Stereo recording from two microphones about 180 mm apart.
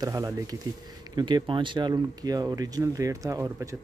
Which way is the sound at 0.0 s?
20° right (ahead or behind).